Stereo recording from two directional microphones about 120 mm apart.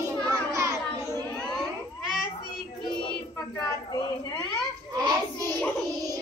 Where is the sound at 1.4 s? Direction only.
5° left (ahead or behind).